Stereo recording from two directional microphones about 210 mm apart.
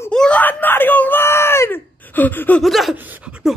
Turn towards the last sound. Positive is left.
turn(degrees=-5)  # may be behind; listen again after turning